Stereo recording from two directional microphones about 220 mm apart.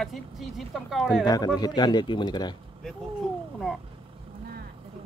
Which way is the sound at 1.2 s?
20° left (ahead or behind).